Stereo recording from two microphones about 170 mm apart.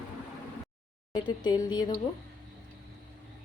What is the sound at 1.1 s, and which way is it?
Speech, 25° left (ahead or behind).